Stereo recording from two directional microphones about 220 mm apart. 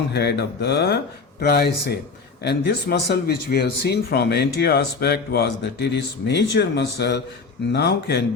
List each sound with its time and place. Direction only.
0.1 s speech: 50° left (ahead or behind)